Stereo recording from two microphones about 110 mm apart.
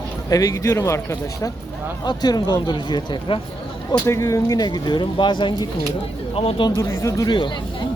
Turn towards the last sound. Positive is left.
turn(degrees=45)  # may be behind; listen again after turning